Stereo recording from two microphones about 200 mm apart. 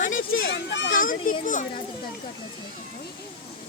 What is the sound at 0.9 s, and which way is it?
Speech, 40° left (ahead or behind).